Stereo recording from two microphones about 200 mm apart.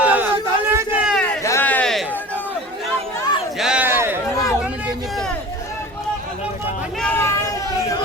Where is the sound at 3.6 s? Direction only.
5° right (ahead or behind).